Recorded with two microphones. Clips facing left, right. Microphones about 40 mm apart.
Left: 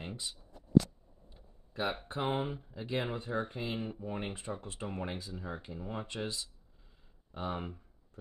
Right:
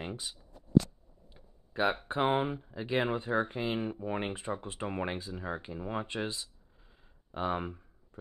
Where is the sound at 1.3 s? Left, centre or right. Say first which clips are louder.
Right 5 dB; right.